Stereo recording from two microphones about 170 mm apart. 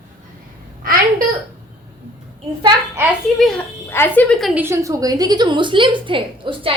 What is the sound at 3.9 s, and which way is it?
Speech, 10° left (ahead or behind).